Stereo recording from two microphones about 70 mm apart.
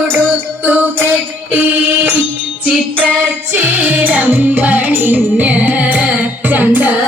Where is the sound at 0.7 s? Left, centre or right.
Right.